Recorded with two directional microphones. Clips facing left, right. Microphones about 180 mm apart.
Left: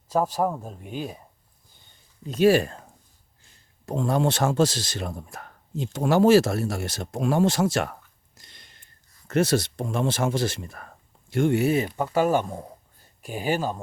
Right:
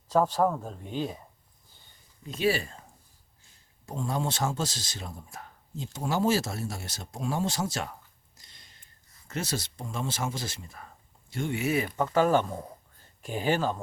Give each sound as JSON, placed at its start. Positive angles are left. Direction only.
{"t": 0.1, "sound": "speech", "side_deg": 10}
{"t": 2.2, "sound": "speech", "side_deg": 45}
{"t": 3.8, "sound": "speech", "side_deg": 70}
{"t": 8.4, "sound": "a sound", "side_deg": 65}
{"t": 9.2, "sound": "speech", "side_deg": 70}
{"t": 11.6, "sound": "speech", "side_deg": 25}
{"t": 11.9, "sound": "speech", "side_deg": 10}